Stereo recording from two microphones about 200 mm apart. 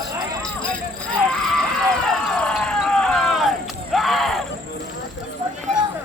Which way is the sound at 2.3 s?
5° left (ahead or behind).